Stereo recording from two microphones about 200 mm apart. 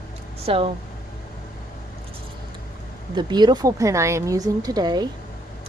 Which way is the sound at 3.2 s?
20° right (ahead or behind).